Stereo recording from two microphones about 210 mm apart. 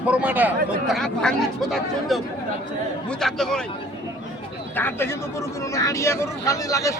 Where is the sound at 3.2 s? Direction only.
Centre (ahead or behind).